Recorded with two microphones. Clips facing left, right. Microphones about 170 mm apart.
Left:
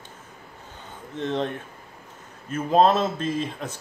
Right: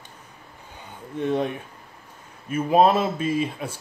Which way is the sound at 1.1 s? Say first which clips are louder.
Right 3 dB; 10° right (ahead or behind).